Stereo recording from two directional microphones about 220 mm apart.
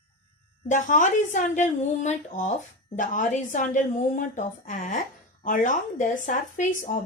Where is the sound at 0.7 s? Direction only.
35° left (ahead or behind).